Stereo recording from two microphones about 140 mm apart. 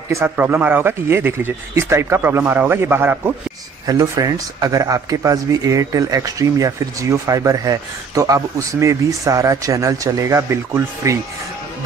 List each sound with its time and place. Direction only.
0.1 s speech: 15° right (ahead or behind)
3.8 s speech: 25° right (ahead or behind)